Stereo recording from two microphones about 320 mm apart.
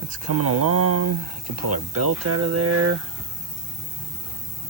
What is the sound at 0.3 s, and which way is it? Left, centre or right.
Speech, right.